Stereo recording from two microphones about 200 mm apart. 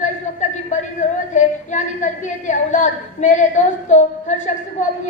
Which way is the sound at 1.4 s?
35° left (ahead or behind).